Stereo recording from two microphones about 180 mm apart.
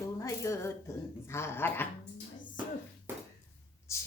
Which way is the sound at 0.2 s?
15° left (ahead or behind).